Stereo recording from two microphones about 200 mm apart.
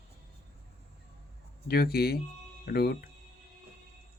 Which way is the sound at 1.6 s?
50° left (ahead or behind).